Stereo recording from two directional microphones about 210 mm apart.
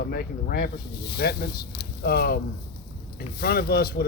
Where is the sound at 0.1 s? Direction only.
45° left (ahead or behind).